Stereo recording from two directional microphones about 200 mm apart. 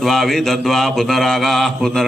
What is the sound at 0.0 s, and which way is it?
A man's voice, centre (ahead or behind).